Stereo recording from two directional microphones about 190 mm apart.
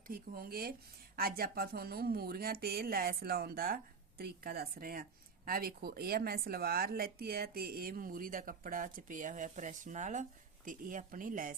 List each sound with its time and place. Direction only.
0.1 s speech: 50° right (ahead or behind)